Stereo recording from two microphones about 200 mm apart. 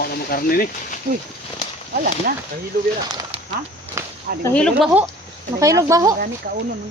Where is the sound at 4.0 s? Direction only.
15° right (ahead or behind).